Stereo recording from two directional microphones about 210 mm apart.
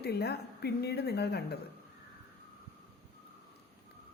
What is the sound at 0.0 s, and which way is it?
Speech, 50° left (ahead or behind).